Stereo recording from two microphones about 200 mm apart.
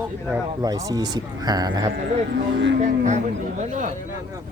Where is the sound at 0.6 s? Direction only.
20° right (ahead or behind).